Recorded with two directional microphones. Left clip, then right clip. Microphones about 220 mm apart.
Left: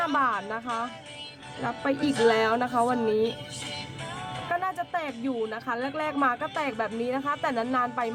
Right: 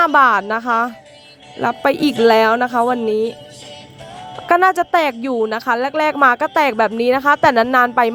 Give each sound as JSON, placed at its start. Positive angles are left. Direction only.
{"t": 0.0, "sound": "a woman's voice", "side_deg": -40}
{"t": 4.4, "sound": "speech", "side_deg": -45}